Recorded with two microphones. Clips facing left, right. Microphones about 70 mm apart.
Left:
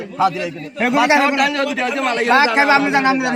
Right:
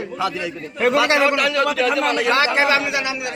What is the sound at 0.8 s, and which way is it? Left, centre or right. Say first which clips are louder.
Speech: left 2 dB; centre.